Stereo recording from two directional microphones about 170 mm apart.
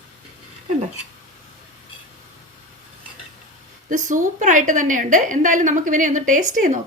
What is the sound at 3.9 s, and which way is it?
A woman's voice, 50° right (ahead or behind).